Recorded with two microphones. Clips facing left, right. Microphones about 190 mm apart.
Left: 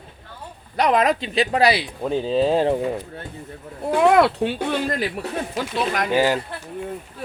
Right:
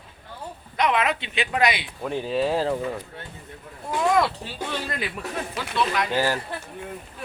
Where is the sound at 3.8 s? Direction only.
60° left (ahead or behind).